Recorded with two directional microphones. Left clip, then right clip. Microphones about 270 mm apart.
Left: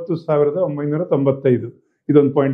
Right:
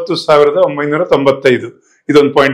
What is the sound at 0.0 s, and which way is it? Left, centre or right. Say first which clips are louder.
Speech: right 8 dB; centre.